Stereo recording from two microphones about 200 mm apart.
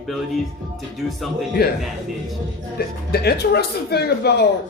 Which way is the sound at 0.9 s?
Centre (ahead or behind).